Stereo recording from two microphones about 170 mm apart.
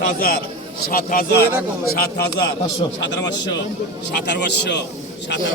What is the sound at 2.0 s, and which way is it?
Speech, 75° left (ahead or behind).